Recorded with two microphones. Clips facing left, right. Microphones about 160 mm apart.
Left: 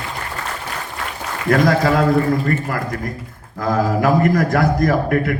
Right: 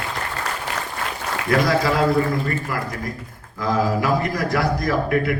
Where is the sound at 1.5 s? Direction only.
50° left (ahead or behind).